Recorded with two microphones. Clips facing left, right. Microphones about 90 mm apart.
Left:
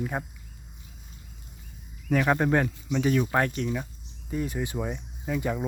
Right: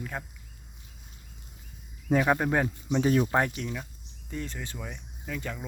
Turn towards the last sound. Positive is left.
turn(degrees=15)  # may be behind; listen again after turning